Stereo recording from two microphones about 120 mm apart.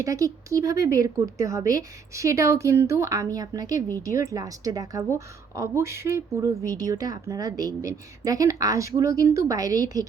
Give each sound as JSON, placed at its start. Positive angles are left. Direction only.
{"t": 0.0, "sound": "speech", "side_deg": -30}